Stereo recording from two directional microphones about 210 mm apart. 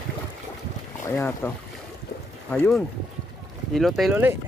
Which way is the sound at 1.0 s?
10° left (ahead or behind).